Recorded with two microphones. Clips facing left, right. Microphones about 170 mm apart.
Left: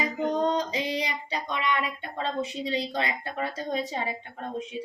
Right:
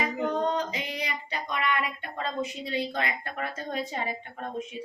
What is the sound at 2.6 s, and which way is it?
Speech, 30° left (ahead or behind).